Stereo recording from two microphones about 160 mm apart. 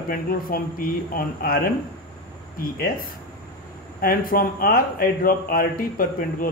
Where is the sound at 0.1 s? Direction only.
65° left (ahead or behind).